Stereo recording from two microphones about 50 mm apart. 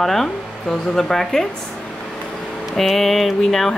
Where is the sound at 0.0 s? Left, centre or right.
Centre.